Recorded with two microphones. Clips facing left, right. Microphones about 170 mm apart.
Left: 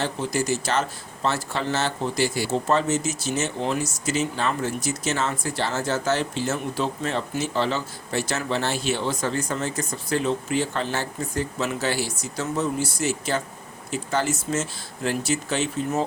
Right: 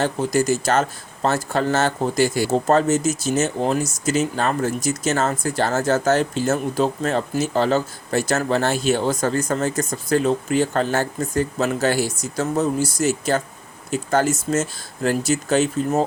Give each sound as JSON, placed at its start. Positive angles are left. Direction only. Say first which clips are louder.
{"t": 0.0, "sound": "speech", "louder": "right 6 dB", "side_deg": -45}